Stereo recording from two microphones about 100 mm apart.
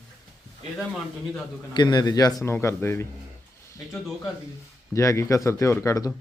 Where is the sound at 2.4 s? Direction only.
25° left (ahead or behind).